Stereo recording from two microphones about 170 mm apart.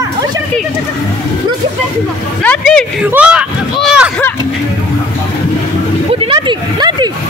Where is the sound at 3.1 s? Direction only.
5° right (ahead or behind).